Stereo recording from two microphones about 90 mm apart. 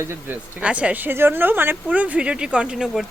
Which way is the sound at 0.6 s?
15° right (ahead or behind).